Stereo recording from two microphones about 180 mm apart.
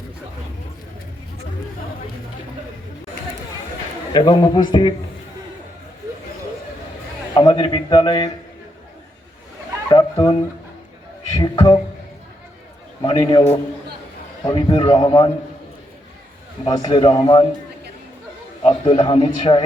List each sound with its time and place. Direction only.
4.1 s a man's voice: 25° left (ahead or behind)
7.3 s a man's voice: 25° left (ahead or behind)
9.9 s a man's voice: 25° left (ahead or behind)
11.3 s a man's voice: 20° left (ahead or behind)
13.0 s a man's voice: 20° left (ahead or behind)
14.4 s a man's voice: 25° left (ahead or behind)
16.6 s a man's voice: 20° left (ahead or behind)
18.6 s a man's voice: 30° left (ahead or behind)